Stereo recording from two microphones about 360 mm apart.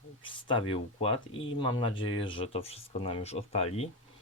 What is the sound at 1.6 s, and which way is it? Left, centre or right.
Speech, centre.